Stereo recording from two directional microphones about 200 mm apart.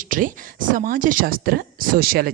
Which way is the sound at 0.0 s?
45° right (ahead or behind).